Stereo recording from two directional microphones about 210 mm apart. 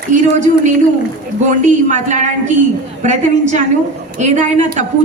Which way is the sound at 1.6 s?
35° right (ahead or behind).